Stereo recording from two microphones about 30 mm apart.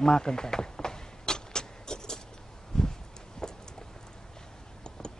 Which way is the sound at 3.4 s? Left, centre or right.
Centre.